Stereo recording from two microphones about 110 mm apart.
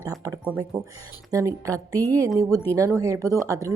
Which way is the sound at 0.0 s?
30° right (ahead or behind).